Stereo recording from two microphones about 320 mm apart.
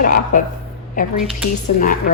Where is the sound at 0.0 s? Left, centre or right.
Left.